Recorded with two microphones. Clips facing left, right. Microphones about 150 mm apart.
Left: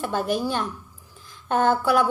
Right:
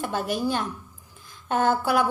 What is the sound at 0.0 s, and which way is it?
Speech, 45° left (ahead or behind).